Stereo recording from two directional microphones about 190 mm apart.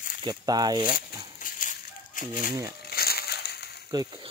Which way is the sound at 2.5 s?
20° right (ahead or behind).